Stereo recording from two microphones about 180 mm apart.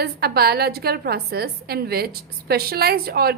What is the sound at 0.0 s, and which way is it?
A woman's voice, 60° right (ahead or behind).